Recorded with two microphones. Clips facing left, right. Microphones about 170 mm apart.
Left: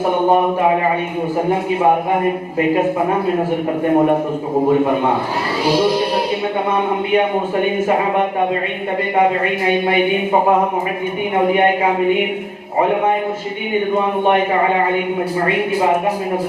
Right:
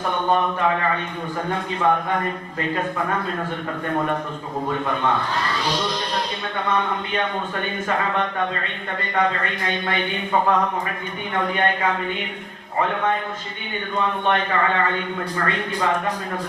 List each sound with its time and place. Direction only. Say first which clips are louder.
0.3 s speech: left 5 dB; 10° left (ahead or behind)
3.8 s a man's voice: left 10 dB; 20° left (ahead or behind)
5.6 s speech: left 10 dB; 10° left (ahead or behind)
13.7 s speech: left 8 dB; 10° left (ahead or behind)